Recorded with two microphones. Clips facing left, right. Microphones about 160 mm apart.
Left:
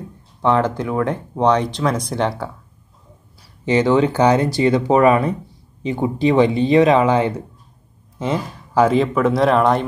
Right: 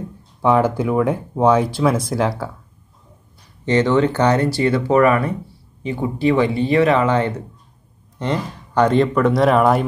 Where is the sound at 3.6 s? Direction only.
10° left (ahead or behind).